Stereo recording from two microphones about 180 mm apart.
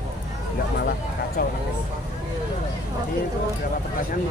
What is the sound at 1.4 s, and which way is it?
Speech, 55° left (ahead or behind).